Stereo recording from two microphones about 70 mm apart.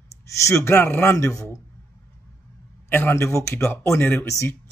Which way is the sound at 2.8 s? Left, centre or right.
Left.